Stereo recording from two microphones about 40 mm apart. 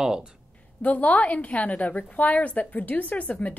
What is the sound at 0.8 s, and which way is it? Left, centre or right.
A woman's voice, left.